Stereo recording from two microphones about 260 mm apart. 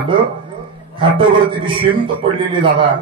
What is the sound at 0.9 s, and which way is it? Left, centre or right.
Speech, centre.